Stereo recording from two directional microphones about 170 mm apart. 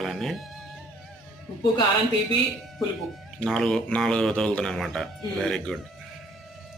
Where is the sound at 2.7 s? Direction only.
Centre (ahead or behind).